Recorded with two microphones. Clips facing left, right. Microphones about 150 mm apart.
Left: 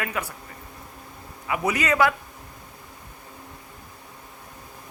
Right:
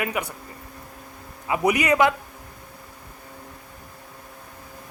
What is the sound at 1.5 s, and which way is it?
Speech, 15° right (ahead or behind).